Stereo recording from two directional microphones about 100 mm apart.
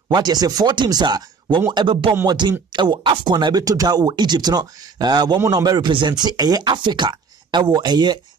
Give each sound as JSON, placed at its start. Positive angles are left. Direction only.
{"t": 0.1, "sound": "speech", "side_deg": -45}